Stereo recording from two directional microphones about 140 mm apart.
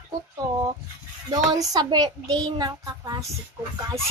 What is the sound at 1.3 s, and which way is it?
Speech, 25° right (ahead or behind).